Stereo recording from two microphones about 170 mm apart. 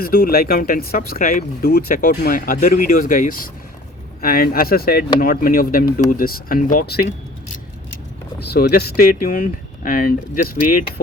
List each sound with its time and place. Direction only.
0.0 s speech: 60° left (ahead or behind)
8.5 s speech: 65° left (ahead or behind)